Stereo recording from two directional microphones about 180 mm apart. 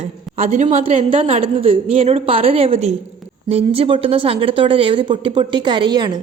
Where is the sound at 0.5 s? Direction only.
40° right (ahead or behind).